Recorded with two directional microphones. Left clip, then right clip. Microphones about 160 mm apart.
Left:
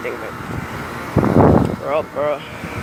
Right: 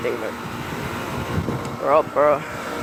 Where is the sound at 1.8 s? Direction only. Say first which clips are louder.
Right 3 dB; 10° right (ahead or behind).